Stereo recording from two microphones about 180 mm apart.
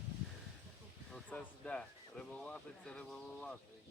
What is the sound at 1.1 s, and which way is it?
Speech, 5° left (ahead or behind).